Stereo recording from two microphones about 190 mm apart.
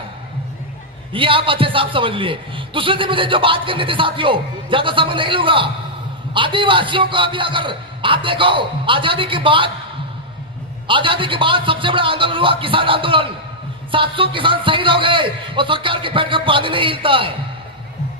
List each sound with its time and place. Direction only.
1.1 s a man's voice: 25° right (ahead or behind)
10.8 s a man's voice: 25° right (ahead or behind)